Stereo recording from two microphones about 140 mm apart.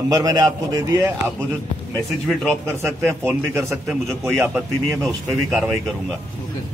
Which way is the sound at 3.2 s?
20° right (ahead or behind).